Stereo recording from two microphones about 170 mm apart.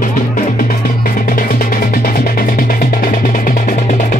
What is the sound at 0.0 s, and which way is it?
Music, 55° left (ahead or behind).